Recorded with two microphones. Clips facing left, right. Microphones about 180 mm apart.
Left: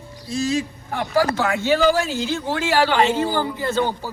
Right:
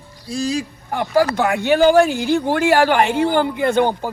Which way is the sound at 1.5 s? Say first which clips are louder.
Right 6 dB; 60° right (ahead or behind).